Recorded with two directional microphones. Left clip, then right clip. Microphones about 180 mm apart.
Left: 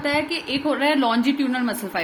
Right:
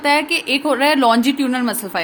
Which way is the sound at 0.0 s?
35° right (ahead or behind).